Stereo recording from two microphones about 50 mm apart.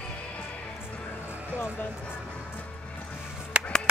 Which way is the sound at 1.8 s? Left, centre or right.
Left.